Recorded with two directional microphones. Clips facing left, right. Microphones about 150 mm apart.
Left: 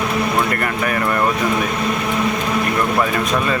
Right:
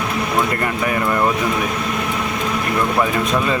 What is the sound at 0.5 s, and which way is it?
Speech, 20° right (ahead or behind).